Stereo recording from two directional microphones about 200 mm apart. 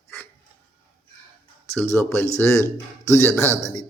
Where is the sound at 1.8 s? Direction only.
10° left (ahead or behind).